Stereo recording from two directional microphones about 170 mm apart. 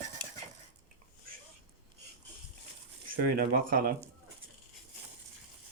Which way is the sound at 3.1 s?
55° right (ahead or behind).